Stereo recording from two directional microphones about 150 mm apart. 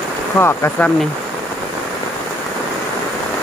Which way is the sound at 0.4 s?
15° left (ahead or behind).